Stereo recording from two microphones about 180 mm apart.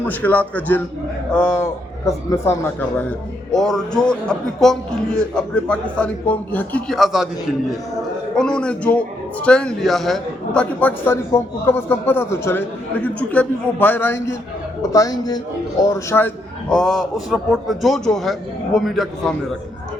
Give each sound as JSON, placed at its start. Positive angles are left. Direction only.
{"t": 0.0, "sound": "a man's voice", "side_deg": 10}
{"t": 8.4, "sound": "a man's voice", "side_deg": 5}